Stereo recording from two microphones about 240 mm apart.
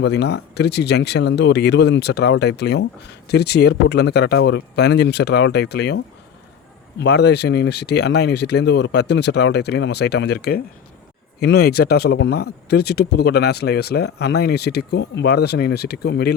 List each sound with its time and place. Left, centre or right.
0.0 s speech: left
7.0 s speech: left